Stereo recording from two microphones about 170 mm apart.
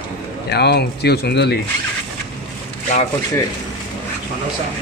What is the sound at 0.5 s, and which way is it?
Speech, 75° left (ahead or behind).